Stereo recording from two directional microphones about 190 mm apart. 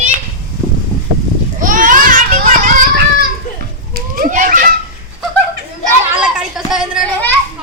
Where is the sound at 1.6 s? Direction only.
45° right (ahead or behind).